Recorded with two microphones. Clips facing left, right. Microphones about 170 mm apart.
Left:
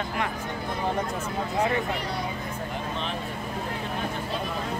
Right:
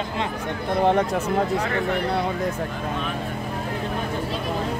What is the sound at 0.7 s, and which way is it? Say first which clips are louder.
Speech: right 10 dB; 75° right (ahead or behind).